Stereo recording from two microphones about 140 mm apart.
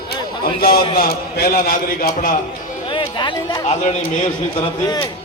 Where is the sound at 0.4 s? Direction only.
90° left.